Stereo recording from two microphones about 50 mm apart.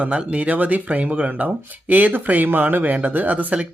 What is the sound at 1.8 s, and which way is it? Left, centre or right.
Speech, right.